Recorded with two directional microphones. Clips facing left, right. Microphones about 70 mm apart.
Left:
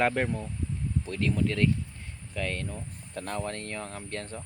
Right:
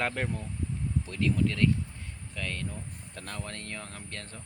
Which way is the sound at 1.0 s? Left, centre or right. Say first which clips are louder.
Even; centre.